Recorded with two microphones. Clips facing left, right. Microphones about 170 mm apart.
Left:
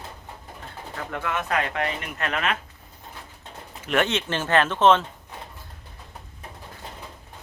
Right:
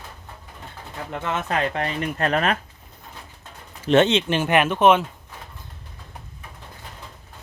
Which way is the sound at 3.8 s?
25° right (ahead or behind).